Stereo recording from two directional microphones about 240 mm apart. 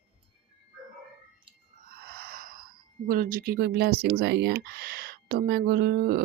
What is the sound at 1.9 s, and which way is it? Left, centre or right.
Groan, right.